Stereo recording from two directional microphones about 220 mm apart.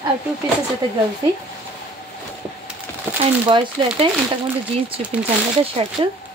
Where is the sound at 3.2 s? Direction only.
25° right (ahead or behind).